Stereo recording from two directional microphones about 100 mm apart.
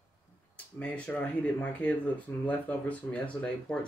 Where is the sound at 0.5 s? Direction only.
10° left (ahead or behind).